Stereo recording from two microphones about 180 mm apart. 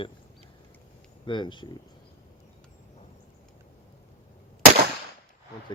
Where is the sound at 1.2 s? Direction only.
25° left (ahead or behind).